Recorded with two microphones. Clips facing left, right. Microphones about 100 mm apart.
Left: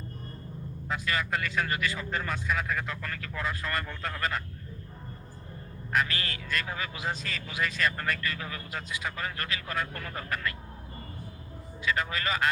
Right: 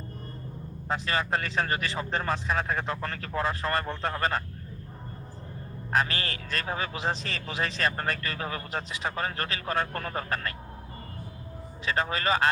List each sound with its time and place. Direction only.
0.9 s a man's voice: 30° right (ahead or behind)
5.9 s a man's voice: 30° right (ahead or behind)
11.9 s a man's voice: 30° right (ahead or behind)